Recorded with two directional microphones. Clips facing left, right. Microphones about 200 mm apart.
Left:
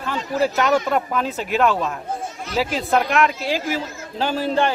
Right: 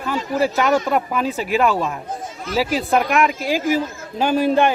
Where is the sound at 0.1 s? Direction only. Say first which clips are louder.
Right 1 dB; 10° right (ahead or behind).